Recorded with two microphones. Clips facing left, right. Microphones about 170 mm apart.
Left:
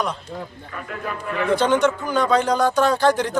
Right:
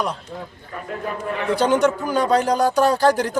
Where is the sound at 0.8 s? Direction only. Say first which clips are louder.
Right 2 dB; 30° right (ahead or behind).